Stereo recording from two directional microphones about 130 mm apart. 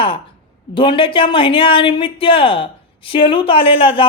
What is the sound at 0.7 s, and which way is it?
A woman's voice, 40° left (ahead or behind).